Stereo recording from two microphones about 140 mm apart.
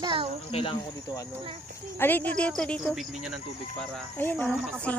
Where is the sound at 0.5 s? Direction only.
45° left (ahead or behind).